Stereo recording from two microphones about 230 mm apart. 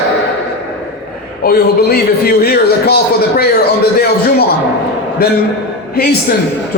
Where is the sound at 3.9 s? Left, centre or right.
Left.